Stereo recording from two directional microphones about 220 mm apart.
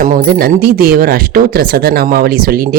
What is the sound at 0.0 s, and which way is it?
Speech, 40° right (ahead or behind).